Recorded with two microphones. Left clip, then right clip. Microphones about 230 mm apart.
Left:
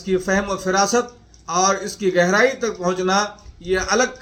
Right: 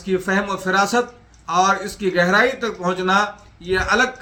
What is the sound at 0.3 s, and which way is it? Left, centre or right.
A man's voice, centre.